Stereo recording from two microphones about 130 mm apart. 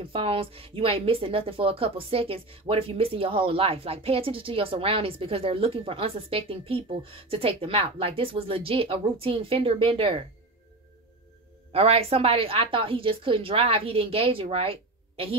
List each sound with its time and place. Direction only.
0.0 s a woman's voice: 45° right (ahead or behind)
11.7 s a woman's voice: 50° right (ahead or behind)